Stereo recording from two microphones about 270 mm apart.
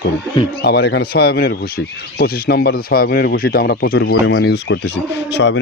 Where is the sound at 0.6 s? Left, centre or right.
Left.